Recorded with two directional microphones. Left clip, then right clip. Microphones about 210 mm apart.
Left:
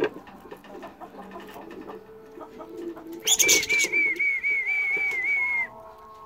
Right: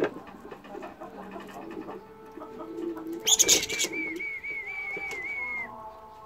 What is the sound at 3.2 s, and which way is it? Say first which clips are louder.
Bird: left 2 dB; 10° left (ahead or behind).